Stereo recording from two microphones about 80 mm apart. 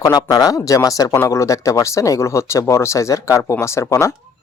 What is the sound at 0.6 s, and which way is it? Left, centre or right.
Speech, left.